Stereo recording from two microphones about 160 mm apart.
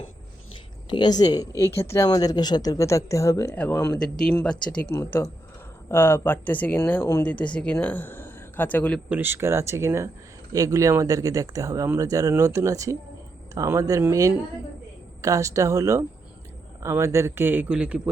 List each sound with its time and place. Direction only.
0.9 s speech: 30° left (ahead or behind); by 9.0 s 10° left (ahead or behind)
9.0 s a man's voice: 10° right (ahead or behind)